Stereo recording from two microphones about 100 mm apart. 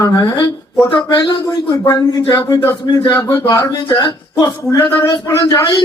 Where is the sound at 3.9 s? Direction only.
50° left (ahead or behind).